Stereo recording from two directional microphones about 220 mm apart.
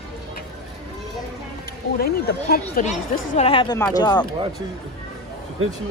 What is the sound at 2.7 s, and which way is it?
Speech, 30° left (ahead or behind).